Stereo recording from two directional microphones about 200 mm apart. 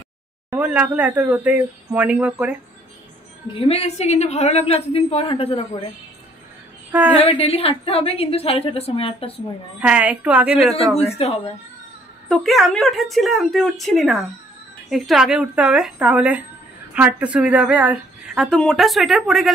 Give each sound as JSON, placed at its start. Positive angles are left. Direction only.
{"t": 0.5, "sound": "speech", "side_deg": -5}
{"t": 3.6, "sound": "a woman's voice", "side_deg": 30}
{"t": 6.9, "sound": "a woman's voice", "side_deg": -10}
{"t": 7.2, "sound": "a woman's voice", "side_deg": 30}
{"t": 9.8, "sound": "speech", "side_deg": -5}
{"t": 10.5, "sound": "a woman's voice", "side_deg": 30}
{"t": 12.3, "sound": "speech", "side_deg": 0}